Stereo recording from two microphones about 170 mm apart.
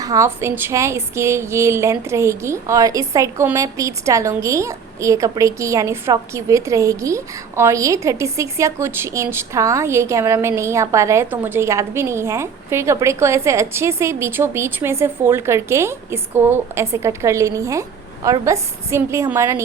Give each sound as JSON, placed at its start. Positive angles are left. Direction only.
{"t": 0.0, "sound": "a woman's voice", "side_deg": -20}